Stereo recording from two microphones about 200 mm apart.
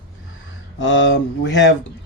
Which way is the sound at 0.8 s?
65° left (ahead or behind).